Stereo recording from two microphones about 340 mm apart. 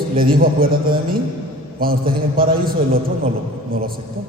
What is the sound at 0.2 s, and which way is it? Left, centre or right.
A man's voice, right.